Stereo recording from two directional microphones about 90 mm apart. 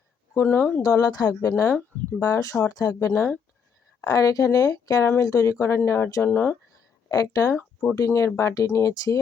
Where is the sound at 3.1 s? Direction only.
25° left (ahead or behind).